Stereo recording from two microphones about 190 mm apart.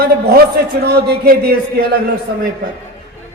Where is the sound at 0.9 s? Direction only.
55° right (ahead or behind).